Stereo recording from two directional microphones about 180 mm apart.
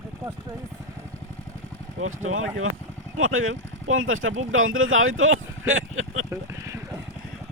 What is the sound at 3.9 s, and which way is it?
Speech, 90° right.